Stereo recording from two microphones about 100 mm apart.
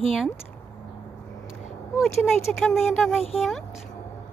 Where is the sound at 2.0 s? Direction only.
Centre (ahead or behind).